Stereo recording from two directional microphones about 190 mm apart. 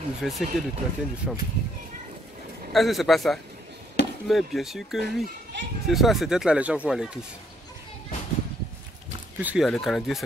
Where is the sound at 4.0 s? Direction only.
60° left (ahead or behind).